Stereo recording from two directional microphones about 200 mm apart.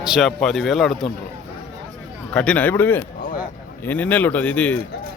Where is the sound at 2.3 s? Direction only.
5° left (ahead or behind).